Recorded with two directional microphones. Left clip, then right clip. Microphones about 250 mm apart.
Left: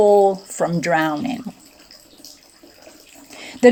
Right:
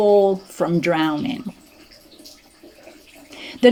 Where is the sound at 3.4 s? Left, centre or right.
Left.